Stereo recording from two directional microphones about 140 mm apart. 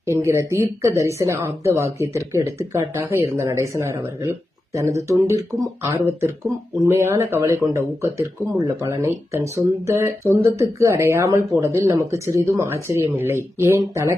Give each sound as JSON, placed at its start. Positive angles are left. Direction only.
{"t": 0.0, "sound": "speech", "side_deg": -20}